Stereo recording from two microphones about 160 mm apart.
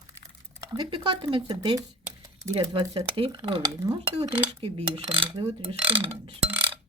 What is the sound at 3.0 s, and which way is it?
Speech, 30° right (ahead or behind).